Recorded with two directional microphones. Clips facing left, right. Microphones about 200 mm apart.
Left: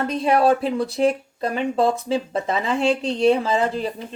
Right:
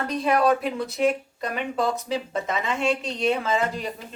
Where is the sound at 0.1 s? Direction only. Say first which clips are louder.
Left 2 dB; 30° left (ahead or behind).